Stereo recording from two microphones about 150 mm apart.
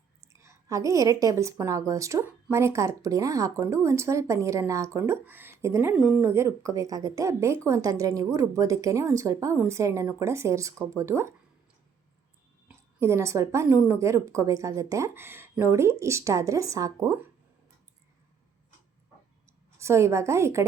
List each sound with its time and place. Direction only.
0.3 s speech: 20° right (ahead or behind)
5.9 s speech: 5° right (ahead or behind)
6.2 s speech: 20° right (ahead or behind)
12.6 s speech: 15° right (ahead or behind)
19.8 s speech: 20° right (ahead or behind)